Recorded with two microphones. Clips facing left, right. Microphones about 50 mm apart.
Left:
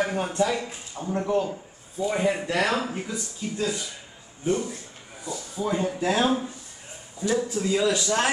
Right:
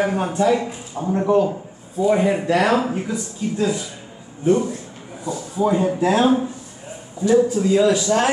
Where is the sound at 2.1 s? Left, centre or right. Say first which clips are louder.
Right 8 dB; centre.